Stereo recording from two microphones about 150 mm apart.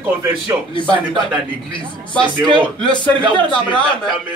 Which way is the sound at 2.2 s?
30° right (ahead or behind).